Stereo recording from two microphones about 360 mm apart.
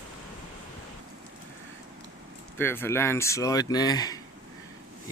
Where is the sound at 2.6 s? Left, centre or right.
Centre.